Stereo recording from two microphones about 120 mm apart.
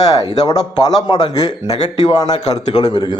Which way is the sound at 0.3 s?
30° left (ahead or behind).